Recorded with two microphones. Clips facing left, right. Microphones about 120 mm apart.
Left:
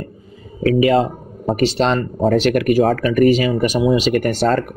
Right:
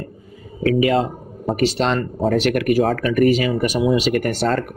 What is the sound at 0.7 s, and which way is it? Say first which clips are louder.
Speech: left 4 dB; 30° left (ahead or behind).